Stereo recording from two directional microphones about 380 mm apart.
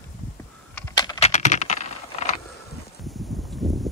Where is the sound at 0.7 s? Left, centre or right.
Centre.